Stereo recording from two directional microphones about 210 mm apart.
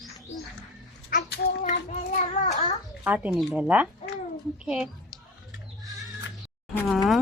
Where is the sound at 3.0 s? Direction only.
5° right (ahead or behind).